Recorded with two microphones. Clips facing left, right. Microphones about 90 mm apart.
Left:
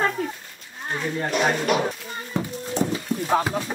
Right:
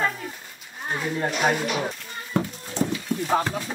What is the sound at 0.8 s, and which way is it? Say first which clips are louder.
Speech: even; 5° right (ahead or behind).